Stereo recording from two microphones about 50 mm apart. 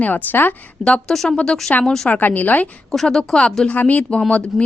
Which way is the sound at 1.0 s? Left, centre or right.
Centre.